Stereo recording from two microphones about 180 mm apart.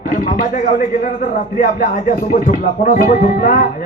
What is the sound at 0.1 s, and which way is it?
Speech, 45° left (ahead or behind).